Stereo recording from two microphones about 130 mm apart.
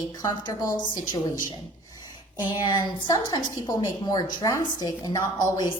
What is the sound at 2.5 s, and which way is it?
A woman's voice, 35° left (ahead or behind).